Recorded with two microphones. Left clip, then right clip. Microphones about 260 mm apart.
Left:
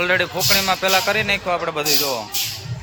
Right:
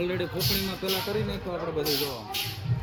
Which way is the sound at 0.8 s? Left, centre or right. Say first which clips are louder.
Left 12 dB; left.